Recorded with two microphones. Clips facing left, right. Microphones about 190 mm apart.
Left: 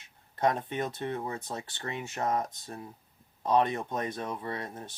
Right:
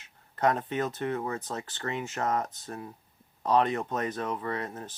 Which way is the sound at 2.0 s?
45° right (ahead or behind).